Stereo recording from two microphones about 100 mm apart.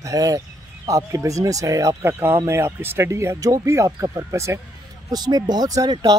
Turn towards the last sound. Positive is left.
turn(degrees=-40)  # may be behind; listen again after turning